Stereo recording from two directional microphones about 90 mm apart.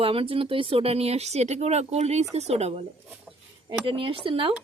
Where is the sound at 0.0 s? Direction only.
90° right.